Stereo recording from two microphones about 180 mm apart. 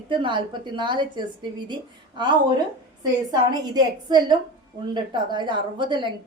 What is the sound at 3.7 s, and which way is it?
A woman's voice, 25° right (ahead or behind).